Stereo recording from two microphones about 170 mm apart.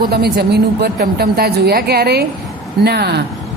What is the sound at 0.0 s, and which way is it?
A woman's voice, 70° right (ahead or behind).